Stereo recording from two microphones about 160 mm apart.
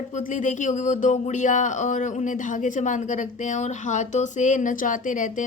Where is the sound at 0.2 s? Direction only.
55° left (ahead or behind).